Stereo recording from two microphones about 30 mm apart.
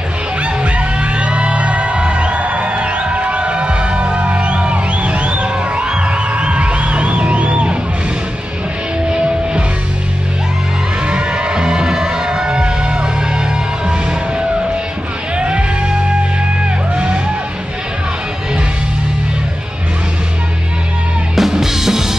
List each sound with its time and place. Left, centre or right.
0.4 s music: right
5.9 s music: right
9.1 s music: right
11.1 s music: right
15.3 s music: right
21.4 s music: centre